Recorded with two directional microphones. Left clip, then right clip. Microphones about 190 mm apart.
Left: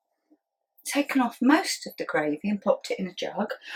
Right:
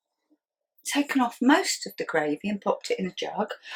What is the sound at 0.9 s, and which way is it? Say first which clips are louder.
Speech: even; 30° right (ahead or behind).